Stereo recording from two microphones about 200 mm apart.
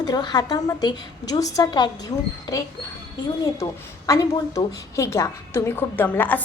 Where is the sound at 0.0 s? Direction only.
20° left (ahead or behind).